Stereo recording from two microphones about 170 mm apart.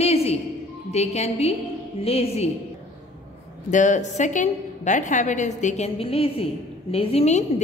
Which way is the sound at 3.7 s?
45° left (ahead or behind).